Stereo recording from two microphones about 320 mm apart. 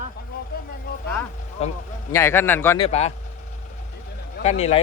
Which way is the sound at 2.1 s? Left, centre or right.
Centre.